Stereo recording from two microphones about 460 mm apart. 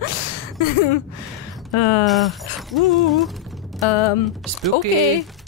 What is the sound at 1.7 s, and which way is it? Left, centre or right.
Speech, left.